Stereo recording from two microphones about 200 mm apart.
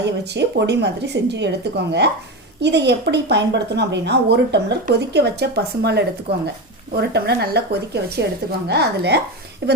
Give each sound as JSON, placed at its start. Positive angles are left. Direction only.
{"t": 0.0, "sound": "a woman's voice", "side_deg": -60}